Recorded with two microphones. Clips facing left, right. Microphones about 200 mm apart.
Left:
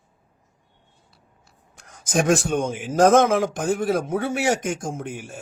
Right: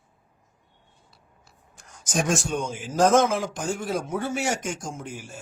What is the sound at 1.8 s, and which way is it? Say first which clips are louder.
A man's voice: left 5 dB; 60° left (ahead or behind).